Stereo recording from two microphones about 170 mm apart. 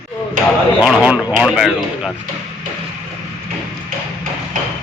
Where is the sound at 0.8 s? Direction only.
5° right (ahead or behind).